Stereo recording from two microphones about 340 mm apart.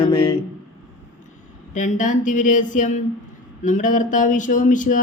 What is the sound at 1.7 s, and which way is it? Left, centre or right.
Speech, left.